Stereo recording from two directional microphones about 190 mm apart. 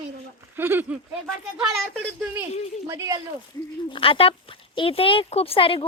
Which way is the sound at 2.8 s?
15° right (ahead or behind).